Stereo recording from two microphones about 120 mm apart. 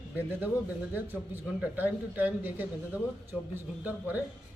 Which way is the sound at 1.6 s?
15° right (ahead or behind).